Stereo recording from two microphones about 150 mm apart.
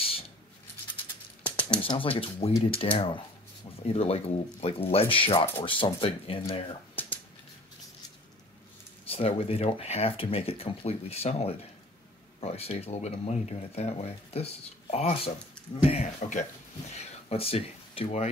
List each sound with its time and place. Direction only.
1.4 s a sound: 10° left (ahead or behind)
1.8 s speech: 35° left (ahead or behind)
9.0 s speech: 40° left (ahead or behind)